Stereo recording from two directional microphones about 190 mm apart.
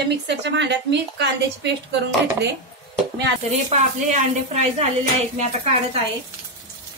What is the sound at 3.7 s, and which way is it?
A woman's voice, 40° right (ahead or behind).